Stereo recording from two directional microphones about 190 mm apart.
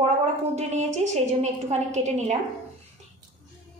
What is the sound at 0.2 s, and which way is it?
A woman's voice, 35° right (ahead or behind).